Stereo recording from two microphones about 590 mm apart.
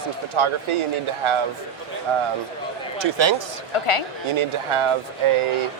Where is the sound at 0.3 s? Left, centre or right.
Right.